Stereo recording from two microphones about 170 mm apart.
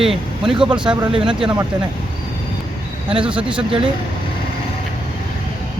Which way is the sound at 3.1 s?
30° right (ahead or behind).